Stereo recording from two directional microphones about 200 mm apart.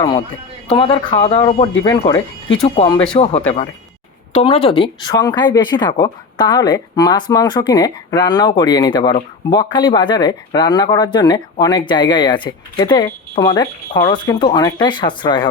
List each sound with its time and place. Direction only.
0.7 s speech: 25° left (ahead or behind)